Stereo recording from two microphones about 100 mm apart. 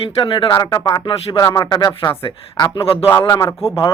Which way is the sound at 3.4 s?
30° left (ahead or behind).